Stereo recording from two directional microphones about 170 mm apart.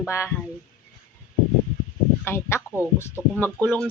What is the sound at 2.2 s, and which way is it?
Speech, 15° left (ahead or behind).